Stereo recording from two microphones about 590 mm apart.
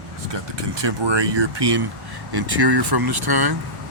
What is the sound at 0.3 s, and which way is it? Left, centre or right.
Speech, right.